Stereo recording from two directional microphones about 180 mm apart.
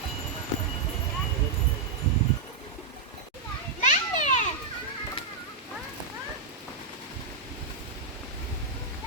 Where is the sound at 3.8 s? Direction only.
45° left (ahead or behind).